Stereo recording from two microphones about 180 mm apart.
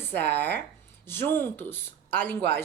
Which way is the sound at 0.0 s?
10° left (ahead or behind).